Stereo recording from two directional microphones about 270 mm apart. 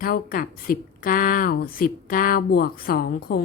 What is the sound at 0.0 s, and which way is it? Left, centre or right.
Speech, left.